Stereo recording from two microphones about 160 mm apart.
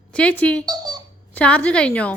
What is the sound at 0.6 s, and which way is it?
Speech, 25° right (ahead or behind).